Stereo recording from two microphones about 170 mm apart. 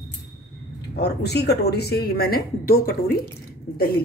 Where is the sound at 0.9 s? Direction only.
75° left (ahead or behind).